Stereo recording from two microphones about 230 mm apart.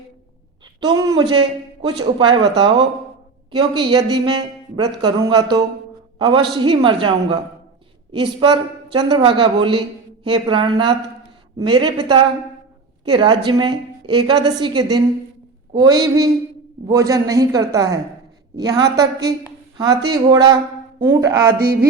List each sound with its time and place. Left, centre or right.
0.6 s a woman's voice: centre
21.6 s music: right